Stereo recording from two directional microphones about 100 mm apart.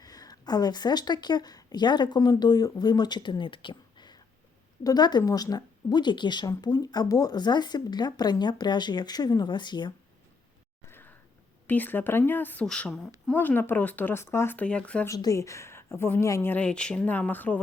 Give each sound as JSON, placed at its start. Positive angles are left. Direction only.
{"t": 0.0, "sound": "speech", "side_deg": 40}
{"t": 10.8, "sound": "a sound", "side_deg": 20}
{"t": 11.6, "sound": "a woman's voice", "side_deg": 15}
{"t": 12.6, "sound": "speech", "side_deg": 5}
{"t": 13.2, "sound": "speech", "side_deg": 15}
{"t": 15.0, "sound": "a woman's voice", "side_deg": 35}
{"t": 16.6, "sound": "speech", "side_deg": 10}